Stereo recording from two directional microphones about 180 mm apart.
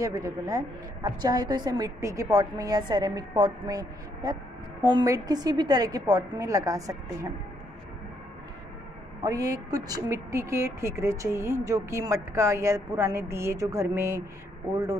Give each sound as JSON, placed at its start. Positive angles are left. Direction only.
{"t": 0.0, "sound": "a woman's voice", "side_deg": -20}
{"t": 9.2, "sound": "a woman's voice", "side_deg": -20}